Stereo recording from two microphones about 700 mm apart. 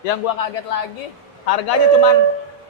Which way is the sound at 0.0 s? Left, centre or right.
Left.